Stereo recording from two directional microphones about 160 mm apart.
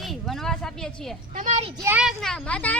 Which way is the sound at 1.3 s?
50° right (ahead or behind).